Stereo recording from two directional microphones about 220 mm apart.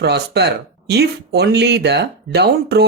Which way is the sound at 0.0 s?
50° right (ahead or behind).